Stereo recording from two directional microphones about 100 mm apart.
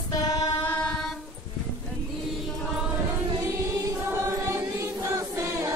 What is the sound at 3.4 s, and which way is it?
Chant, 35° right (ahead or behind).